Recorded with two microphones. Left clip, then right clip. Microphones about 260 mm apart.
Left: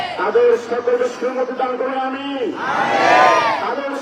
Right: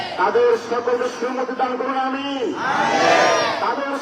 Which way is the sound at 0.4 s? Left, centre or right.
Centre.